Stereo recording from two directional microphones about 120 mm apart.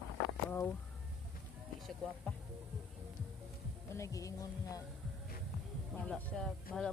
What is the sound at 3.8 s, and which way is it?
Speech, 25° left (ahead or behind).